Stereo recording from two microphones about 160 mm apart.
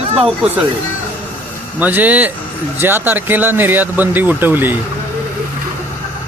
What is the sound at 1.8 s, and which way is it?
Speech, 10° right (ahead or behind).